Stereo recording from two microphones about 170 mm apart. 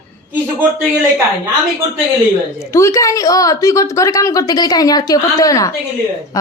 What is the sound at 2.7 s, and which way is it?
A woman's voice, 15° left (ahead or behind).